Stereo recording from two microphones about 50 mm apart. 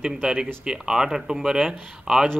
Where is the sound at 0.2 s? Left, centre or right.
Centre.